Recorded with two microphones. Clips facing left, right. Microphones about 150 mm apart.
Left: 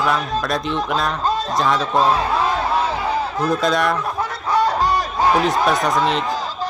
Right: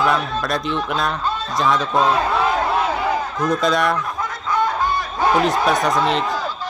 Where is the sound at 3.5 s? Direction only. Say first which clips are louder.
Right 1 dB; centre (ahead or behind).